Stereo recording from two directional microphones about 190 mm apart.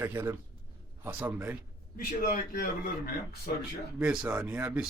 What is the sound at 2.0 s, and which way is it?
Speech, 50° left (ahead or behind).